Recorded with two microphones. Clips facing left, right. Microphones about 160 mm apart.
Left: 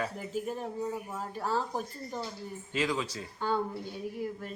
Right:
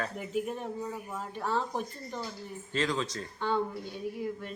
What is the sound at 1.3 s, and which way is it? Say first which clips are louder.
Speech: even; 35° left (ahead or behind).